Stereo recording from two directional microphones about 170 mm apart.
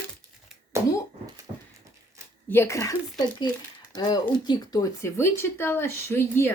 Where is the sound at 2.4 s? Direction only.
15° left (ahead or behind).